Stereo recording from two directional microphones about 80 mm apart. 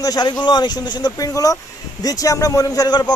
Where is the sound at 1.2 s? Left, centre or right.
Left.